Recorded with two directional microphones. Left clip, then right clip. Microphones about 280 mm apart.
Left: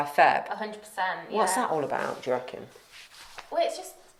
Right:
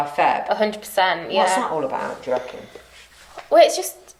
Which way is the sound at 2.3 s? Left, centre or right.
Left.